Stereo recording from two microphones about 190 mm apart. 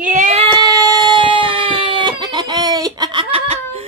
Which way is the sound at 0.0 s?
45° right (ahead or behind).